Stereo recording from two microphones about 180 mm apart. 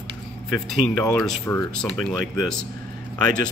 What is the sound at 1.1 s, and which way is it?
Speech, 5° left (ahead or behind).